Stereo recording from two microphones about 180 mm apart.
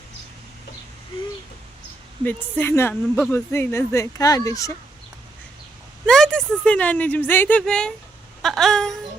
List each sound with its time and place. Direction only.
2.2 s speech: 10° left (ahead or behind)
6.1 s speech: 5° left (ahead or behind)
8.4 s a sound: centre (ahead or behind)